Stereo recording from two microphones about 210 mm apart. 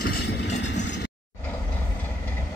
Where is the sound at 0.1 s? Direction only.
55° left (ahead or behind).